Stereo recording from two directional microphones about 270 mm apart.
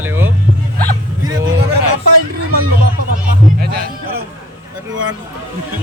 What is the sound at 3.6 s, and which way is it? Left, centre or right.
Speech, right.